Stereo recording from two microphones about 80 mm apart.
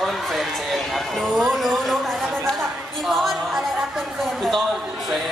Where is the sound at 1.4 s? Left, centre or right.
Centre.